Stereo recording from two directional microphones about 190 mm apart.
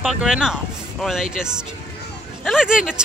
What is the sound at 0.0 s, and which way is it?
Speech, 5° right (ahead or behind).